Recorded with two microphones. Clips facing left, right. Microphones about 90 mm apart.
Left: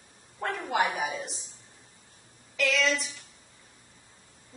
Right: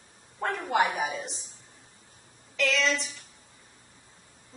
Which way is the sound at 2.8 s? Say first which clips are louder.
Even; 30° right (ahead or behind).